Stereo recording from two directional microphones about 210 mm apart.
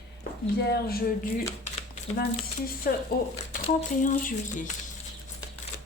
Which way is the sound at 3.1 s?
45° left (ahead or behind).